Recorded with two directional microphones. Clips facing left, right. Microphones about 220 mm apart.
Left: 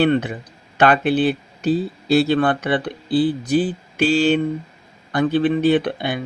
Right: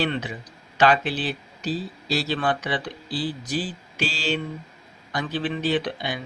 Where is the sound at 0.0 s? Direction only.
55° left (ahead or behind).